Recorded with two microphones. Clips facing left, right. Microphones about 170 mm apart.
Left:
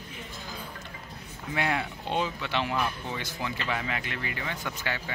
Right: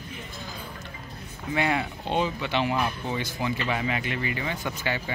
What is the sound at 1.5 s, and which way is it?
Speech, 5° right (ahead or behind).